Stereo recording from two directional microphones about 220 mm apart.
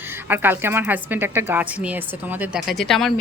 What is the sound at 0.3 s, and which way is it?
A woman's voice, 10° right (ahead or behind).